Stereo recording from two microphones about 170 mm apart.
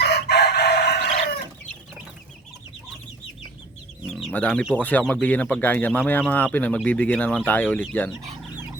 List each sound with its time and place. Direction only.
0.0 s crowing: 70° left (ahead or behind)
4.0 s speech: centre (ahead or behind)